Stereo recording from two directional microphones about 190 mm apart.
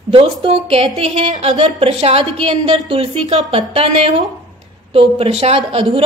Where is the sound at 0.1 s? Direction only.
30° right (ahead or behind).